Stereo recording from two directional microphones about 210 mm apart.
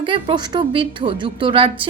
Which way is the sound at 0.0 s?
25° right (ahead or behind).